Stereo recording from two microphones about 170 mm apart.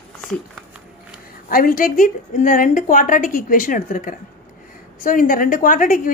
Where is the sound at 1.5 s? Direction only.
55° left (ahead or behind).